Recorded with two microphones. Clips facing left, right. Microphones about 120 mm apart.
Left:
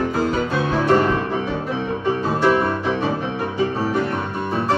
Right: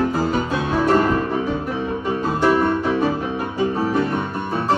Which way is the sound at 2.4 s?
5° right (ahead or behind).